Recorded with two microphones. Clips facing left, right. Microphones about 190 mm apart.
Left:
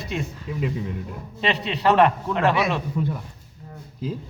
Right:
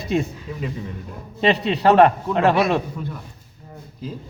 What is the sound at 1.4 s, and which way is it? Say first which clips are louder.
A man's voice: right 6 dB; 40° right (ahead or behind).